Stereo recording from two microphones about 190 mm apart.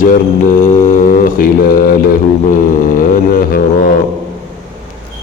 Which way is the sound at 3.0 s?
45° left (ahead or behind).